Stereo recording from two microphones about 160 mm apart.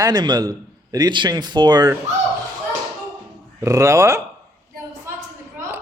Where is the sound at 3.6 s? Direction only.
20° right (ahead or behind).